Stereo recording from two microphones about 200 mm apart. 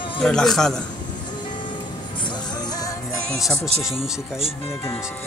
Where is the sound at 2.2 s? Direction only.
20° left (ahead or behind).